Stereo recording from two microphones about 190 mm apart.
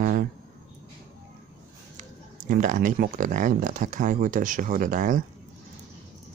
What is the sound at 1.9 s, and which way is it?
Speech, 45° right (ahead or behind).